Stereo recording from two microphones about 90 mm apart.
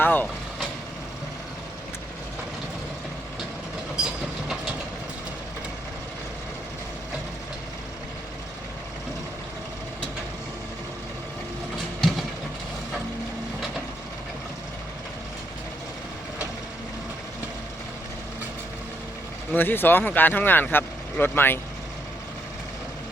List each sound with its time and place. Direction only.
0.0 s vehicle: 20° left (ahead or behind)
11.9 s train: 5° left (ahead or behind)
19.5 s speech: 20° left (ahead or behind)